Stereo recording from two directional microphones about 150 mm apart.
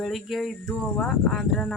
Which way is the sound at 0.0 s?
Centre (ahead or behind).